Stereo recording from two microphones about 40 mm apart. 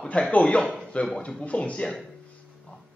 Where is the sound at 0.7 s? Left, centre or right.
Left.